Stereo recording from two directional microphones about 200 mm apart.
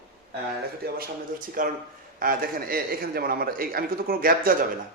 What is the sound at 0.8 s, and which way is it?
A man's voice, 50° right (ahead or behind).